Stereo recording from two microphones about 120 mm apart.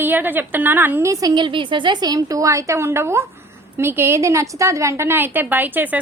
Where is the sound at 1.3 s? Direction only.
45° right (ahead or behind); by 6.0 s 15° right (ahead or behind).